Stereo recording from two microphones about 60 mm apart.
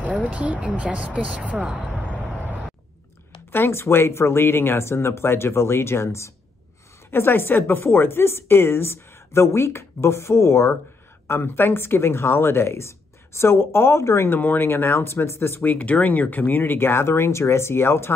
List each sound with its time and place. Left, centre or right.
0.3 s speech: right
3.5 s speech: left
14.3 s speech: left
15.6 s speech: left